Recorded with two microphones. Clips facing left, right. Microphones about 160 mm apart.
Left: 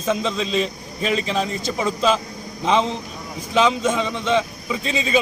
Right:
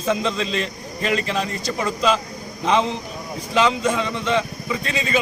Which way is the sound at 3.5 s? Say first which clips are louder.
Left 1 dB; 5° left (ahead or behind).